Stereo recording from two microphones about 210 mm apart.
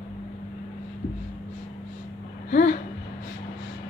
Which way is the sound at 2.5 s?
35° left (ahead or behind).